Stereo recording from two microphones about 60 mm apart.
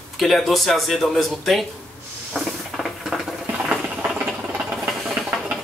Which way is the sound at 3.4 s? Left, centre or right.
Right.